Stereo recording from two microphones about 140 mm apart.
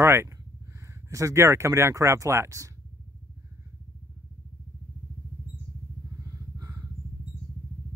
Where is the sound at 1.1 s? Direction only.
20° right (ahead or behind).